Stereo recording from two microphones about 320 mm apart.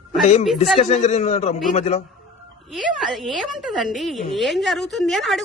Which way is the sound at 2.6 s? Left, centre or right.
Centre.